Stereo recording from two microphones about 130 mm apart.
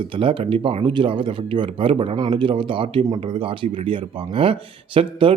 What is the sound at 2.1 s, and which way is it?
Speech, 30° right (ahead or behind).